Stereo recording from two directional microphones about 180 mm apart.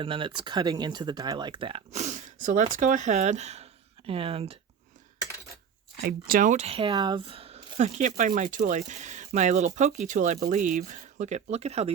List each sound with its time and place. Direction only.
0.0 s speech: 30° right (ahead or behind)
6.0 s speech: 55° right (ahead or behind); by 11.9 s 35° right (ahead or behind)